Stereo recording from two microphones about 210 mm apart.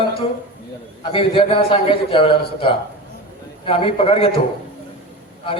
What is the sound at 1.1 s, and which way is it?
A man's voice, 25° left (ahead or behind).